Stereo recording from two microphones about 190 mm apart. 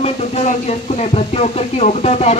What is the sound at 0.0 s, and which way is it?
Speech, 35° left (ahead or behind).